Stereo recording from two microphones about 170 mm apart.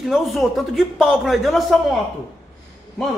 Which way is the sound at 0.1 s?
Centre (ahead or behind).